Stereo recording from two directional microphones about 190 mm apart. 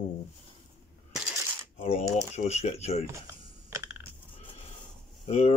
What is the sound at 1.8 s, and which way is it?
Speech, 30° left (ahead or behind).